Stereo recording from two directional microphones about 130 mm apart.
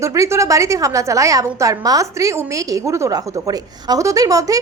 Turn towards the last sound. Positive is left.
turn(degrees=-25)  # may be behind; listen again after turning